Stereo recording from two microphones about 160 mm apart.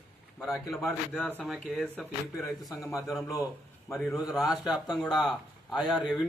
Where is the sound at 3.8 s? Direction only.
Centre (ahead or behind).